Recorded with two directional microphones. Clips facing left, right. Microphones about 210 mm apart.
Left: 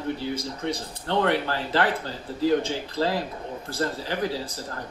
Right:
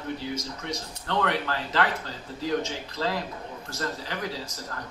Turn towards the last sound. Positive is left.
turn(degrees=30)  # may be behind; listen again after turning